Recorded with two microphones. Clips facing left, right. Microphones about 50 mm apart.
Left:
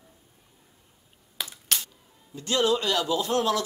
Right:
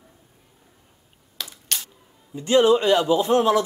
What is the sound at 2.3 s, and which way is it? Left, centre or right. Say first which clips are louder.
Speech: right 8 dB; right.